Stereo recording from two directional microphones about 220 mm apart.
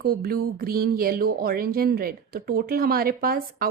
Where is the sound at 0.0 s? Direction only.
45° right (ahead or behind).